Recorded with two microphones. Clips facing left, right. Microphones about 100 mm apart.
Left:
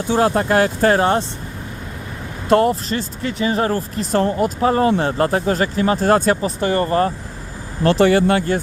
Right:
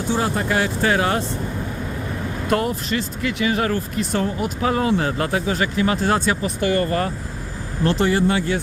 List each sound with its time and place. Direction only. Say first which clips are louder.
0.1 s speech: left 6 dB; 55° left (ahead or behind); by 1.2 s 35° left (ahead or behind)
2.5 s speech: left 7 dB; 30° left (ahead or behind)
6.6 s speech: left 3 dB; 30° left (ahead or behind)
7.9 s speech: left 5 dB; 70° left (ahead or behind); by 8.5 s 55° left (ahead or behind)